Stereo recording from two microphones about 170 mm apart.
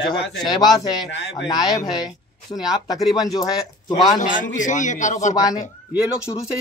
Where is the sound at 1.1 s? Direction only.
90° left.